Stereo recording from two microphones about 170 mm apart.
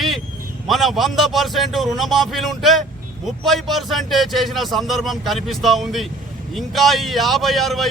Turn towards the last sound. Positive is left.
turn(degrees=0)  # may be behind; listen again after turning